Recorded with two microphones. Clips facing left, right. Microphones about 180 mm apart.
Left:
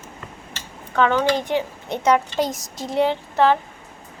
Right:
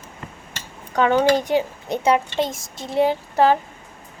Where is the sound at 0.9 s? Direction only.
15° right (ahead or behind).